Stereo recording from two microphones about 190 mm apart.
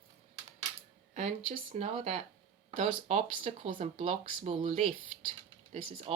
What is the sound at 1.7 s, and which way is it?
Speech, 35° right (ahead or behind).